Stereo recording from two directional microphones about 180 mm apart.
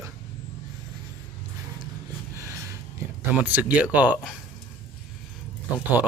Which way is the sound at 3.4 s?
10° right (ahead or behind).